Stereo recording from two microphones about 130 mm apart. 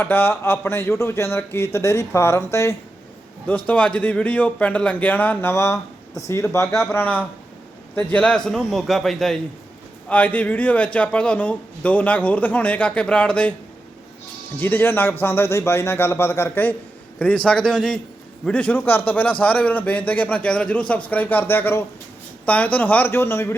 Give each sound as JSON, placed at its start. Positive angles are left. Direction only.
{"t": 0.0, "sound": "speech", "side_deg": 15}
{"t": 3.7, "sound": "a man's voice", "side_deg": 10}
{"t": 14.6, "sound": "speech", "side_deg": 15}